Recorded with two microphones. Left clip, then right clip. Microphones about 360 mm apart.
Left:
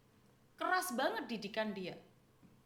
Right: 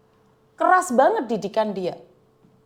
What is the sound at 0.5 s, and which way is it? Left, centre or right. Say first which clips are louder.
A woman's voice: right 19 dB; right.